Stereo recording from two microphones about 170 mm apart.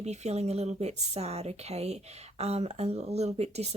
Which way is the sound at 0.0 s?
40° right (ahead or behind).